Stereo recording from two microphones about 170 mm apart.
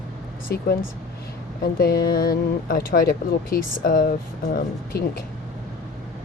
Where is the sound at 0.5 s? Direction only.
70° left (ahead or behind).